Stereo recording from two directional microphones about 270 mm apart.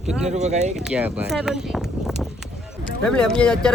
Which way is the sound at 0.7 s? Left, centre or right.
Centre.